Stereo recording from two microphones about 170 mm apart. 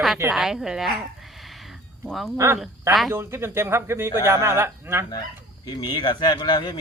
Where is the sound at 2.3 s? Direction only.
15° right (ahead or behind).